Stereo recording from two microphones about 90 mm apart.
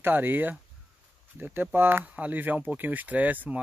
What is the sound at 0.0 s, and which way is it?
Speech, 25° right (ahead or behind).